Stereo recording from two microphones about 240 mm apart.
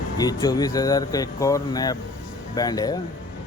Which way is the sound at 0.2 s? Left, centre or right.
Centre.